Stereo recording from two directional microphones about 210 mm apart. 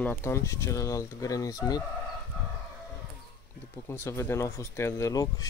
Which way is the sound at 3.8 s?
10° left (ahead or behind).